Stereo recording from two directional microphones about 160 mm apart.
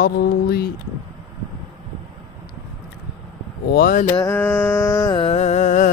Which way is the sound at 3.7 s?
70° left (ahead or behind).